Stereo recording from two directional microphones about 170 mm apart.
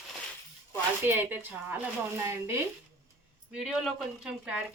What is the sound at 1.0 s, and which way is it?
A woman's voice, 10° right (ahead or behind).